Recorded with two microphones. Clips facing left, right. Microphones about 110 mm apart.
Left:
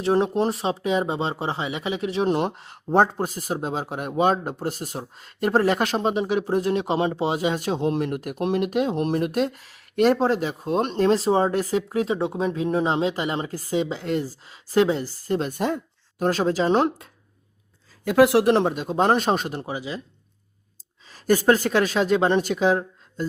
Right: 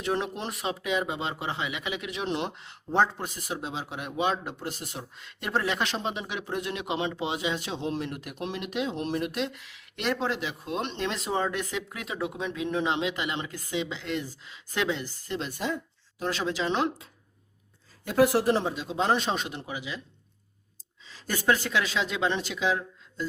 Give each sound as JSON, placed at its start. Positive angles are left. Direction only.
{"t": 0.0, "sound": "speech", "side_deg": 35}
{"t": 18.0, "sound": "speech", "side_deg": 90}
{"t": 21.1, "sound": "a woman's voice", "side_deg": 45}